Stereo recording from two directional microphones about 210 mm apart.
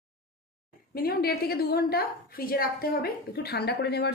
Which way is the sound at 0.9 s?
45° left (ahead or behind).